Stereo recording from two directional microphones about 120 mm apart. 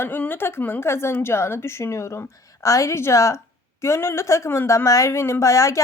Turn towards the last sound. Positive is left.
turn(degrees=25)  # may be behind; listen again after turning